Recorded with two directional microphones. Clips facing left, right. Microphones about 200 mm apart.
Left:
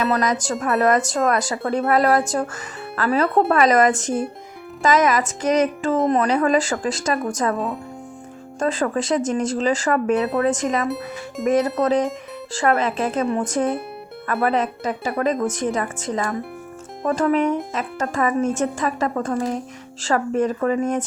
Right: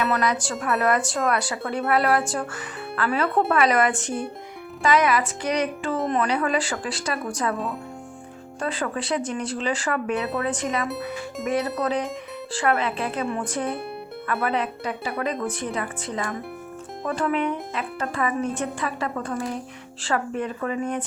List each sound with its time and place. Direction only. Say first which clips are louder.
0.0 s speech: left 3 dB; 40° left (ahead or behind)
8.5 s speech: left 6 dB; 45° left (ahead or behind)
10.8 s speech: left 3 dB; centre (ahead or behind)
11.4 s speech: left 6 dB; 45° left (ahead or behind)